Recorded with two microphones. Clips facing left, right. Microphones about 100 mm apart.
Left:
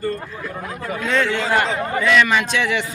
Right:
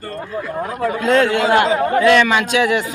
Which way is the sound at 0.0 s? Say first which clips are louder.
Even; 55° right (ahead or behind).